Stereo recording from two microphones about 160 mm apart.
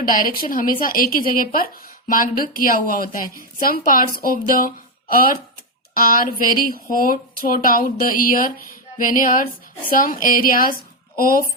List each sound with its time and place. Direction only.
0.0 s speech: 60° left (ahead or behind)